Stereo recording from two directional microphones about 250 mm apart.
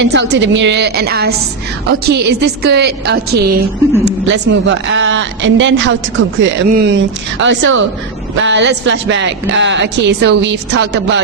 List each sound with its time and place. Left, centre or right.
0.0 s a woman's voice: right